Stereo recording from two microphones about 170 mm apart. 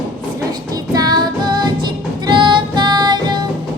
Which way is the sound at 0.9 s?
25° right (ahead or behind).